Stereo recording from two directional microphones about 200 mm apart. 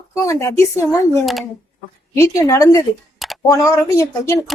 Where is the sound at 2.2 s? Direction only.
15° left (ahead or behind).